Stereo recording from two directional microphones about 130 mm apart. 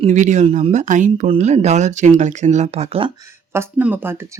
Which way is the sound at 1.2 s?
60° right (ahead or behind).